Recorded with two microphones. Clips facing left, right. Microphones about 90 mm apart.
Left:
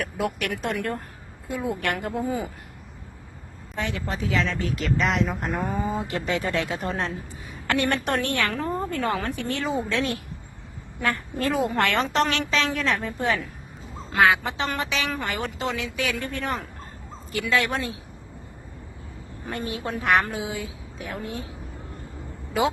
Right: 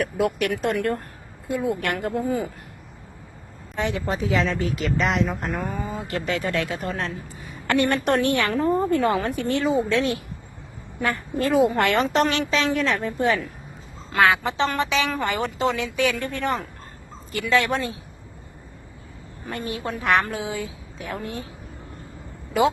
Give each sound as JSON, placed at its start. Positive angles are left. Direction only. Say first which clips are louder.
{"t": 0.0, "sound": "a woman's voice", "louder": "right 5 dB", "side_deg": 0}
{"t": 3.8, "sound": "a woman's voice", "louder": "right 4 dB", "side_deg": -20}
{"t": 4.7, "sound": "a woman's voice", "louder": "right 1 dB", "side_deg": -5}
{"t": 5.6, "sound": "speech", "louder": "left 3 dB", "side_deg": 20}
{"t": 6.2, "sound": "a woman's voice", "louder": "right 2 dB", "side_deg": 5}
{"t": 6.5, "sound": "speech", "louder": "right 1 dB", "side_deg": 15}
{"t": 7.7, "sound": "a woman's voice", "louder": "right 3 dB", "side_deg": 0}
{"t": 8.2, "sound": "a woman's voice", "louder": "right 5 dB", "side_deg": -15}
{"t": 19.5, "sound": "a woman's voice", "louder": "right 1 dB", "side_deg": 5}